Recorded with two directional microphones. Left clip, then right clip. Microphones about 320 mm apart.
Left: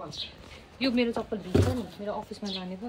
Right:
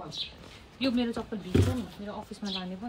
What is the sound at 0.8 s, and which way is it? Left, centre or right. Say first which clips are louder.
Speech: left 3 dB; centre.